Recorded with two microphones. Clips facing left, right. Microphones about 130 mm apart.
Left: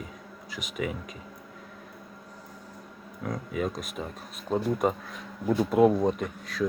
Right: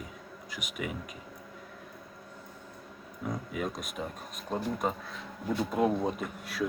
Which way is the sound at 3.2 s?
Centre (ahead or behind).